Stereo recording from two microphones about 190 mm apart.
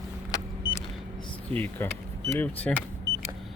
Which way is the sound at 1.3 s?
10° left (ahead or behind).